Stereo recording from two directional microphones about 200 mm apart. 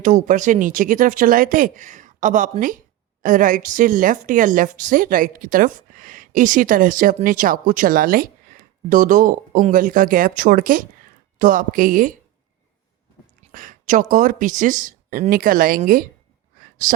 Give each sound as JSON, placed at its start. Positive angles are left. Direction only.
{"t": 0.0, "sound": "a woman's voice", "side_deg": -40}
{"t": 13.5, "sound": "a woman's voice", "side_deg": -40}
{"t": 16.6, "sound": "a sound", "side_deg": -40}